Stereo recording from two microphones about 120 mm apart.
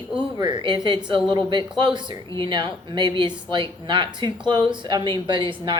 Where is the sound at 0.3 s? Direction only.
40° right (ahead or behind).